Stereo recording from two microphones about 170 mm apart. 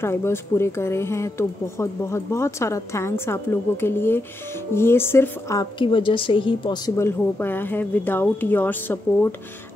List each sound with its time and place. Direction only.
0.0 s a woman's voice: 15° left (ahead or behind)
7.0 s speech: 10° left (ahead or behind)